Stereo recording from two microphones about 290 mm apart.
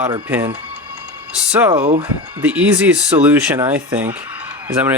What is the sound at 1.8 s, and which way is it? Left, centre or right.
Speech, right.